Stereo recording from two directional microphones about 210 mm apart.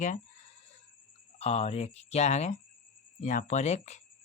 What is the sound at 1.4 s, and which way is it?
Speech, 30° left (ahead or behind).